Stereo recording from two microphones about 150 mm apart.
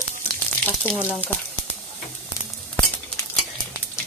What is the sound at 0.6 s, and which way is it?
Speech, 10° left (ahead or behind).